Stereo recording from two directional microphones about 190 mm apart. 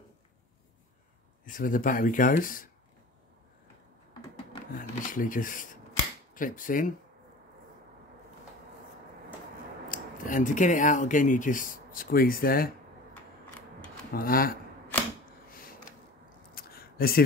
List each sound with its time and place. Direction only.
1.4 s speech: 45° left (ahead or behind)
4.7 s speech: 45° left (ahead or behind)
9.8 s speech: 45° left (ahead or behind)
14.1 s speech: 50° left (ahead or behind)
15.5 s a sound: 50° left (ahead or behind)